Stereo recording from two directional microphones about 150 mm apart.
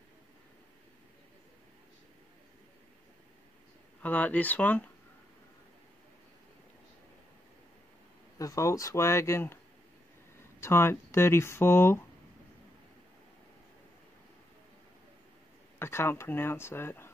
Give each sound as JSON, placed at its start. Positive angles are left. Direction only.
{"t": 4.0, "sound": "speech", "side_deg": 10}
{"t": 8.4, "sound": "speech", "side_deg": 20}
{"t": 10.6, "sound": "speech", "side_deg": 15}
{"t": 15.8, "sound": "speech", "side_deg": 15}